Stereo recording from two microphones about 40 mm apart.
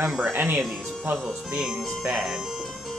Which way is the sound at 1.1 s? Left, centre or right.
Right.